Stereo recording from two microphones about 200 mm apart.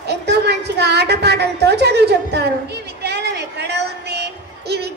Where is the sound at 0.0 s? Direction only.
55° right (ahead or behind).